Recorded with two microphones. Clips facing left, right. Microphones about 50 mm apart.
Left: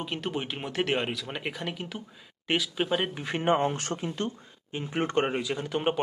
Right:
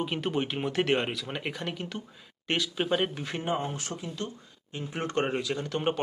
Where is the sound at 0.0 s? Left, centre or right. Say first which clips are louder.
Right 3 dB; centre.